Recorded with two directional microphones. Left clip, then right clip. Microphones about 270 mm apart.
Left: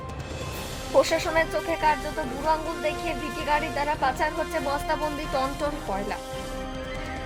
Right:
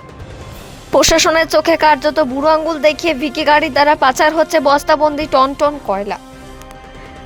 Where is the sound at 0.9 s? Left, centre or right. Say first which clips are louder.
Right 11 dB; right.